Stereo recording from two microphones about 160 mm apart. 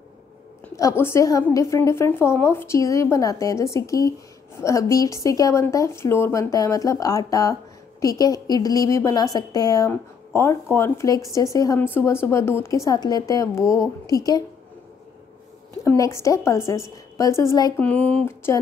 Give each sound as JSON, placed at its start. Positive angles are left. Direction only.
{"t": 0.7, "sound": "a woman's voice", "side_deg": 20}
{"t": 15.8, "sound": "a woman's voice", "side_deg": 20}
{"t": 17.7, "sound": "a sound", "side_deg": 10}